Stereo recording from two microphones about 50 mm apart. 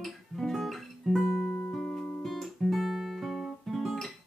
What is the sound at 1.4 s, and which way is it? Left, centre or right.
Music, left.